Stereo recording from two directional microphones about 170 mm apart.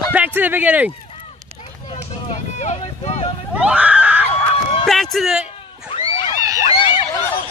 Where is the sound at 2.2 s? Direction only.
40° left (ahead or behind).